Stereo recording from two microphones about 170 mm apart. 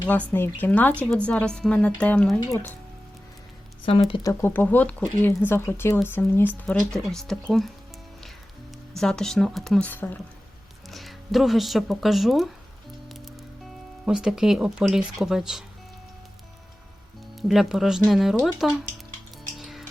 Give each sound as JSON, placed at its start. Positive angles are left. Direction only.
{"t": 0.3, "sound": "speech", "side_deg": 10}
{"t": 3.8, "sound": "speech", "side_deg": 30}
{"t": 4.2, "sound": "speech", "side_deg": 15}
{"t": 9.0, "sound": "speech", "side_deg": 5}
{"t": 10.8, "sound": "speech", "side_deg": 0}
{"t": 14.0, "sound": "speech", "side_deg": -5}
{"t": 17.5, "sound": "speech", "side_deg": 0}
{"t": 19.5, "sound": "music", "side_deg": 0}